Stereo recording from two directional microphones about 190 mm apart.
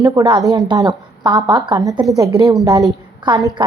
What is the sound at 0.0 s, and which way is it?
A woman's voice, 20° right (ahead or behind).